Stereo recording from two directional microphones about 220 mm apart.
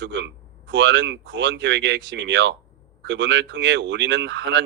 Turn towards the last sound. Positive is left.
turn(degrees=-55)  # may be behind; listen again after turning